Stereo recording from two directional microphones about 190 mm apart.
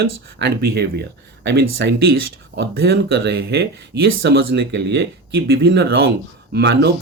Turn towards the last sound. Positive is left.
turn(degrees=-65)  # may be behind; listen again after turning